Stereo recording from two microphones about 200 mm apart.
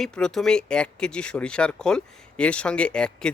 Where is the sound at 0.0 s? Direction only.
5° left (ahead or behind).